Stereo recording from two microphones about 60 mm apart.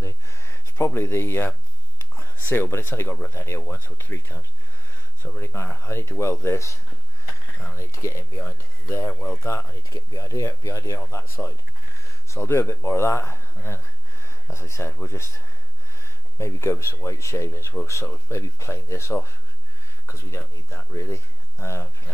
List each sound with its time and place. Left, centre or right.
0.0 s a sound: left
2.5 s speech: left
8.4 s speech: left
9.8 s speech: left